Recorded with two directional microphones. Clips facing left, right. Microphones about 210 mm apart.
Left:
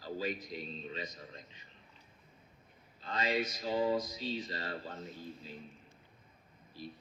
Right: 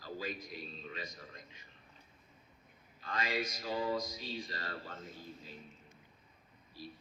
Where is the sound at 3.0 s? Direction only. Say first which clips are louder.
Left 3 dB; 20° left (ahead or behind).